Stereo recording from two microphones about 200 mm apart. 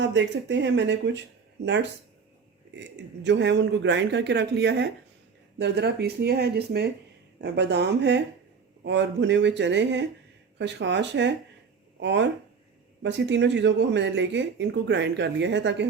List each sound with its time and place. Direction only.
0.0 s speech: 65° right (ahead or behind)
3.2 s speech: 60° right (ahead or behind)